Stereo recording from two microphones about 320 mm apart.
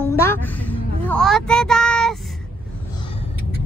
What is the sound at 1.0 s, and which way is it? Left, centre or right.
Speech, centre.